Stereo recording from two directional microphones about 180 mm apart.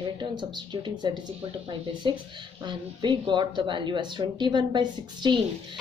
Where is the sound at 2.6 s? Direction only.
25° right (ahead or behind).